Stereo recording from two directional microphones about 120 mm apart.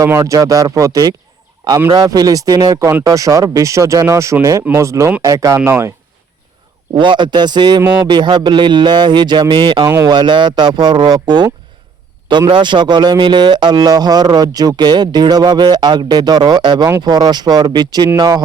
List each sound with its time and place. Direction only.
0.0 s speech: 25° right (ahead or behind)
6.9 s a man's voice: 40° right (ahead or behind)